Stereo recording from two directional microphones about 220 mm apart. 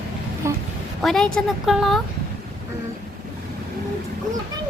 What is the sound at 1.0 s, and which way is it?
A woman's voice, centre (ahead or behind).